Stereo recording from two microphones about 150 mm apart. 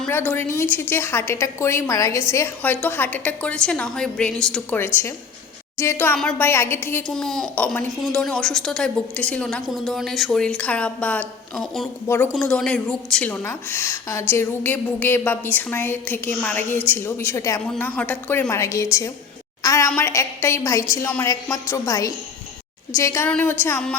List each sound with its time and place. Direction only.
0.1 s a woman's voice: 15° left (ahead or behind)
5.7 s a woman's voice: 15° left (ahead or behind)
7.1 s a woman's voice: 5° left (ahead or behind)
12.0 s a woman's voice: 15° left (ahead or behind)
12.3 s a woman's voice: 5° left (ahead or behind)
17.7 s a woman's voice: 10° left (ahead or behind)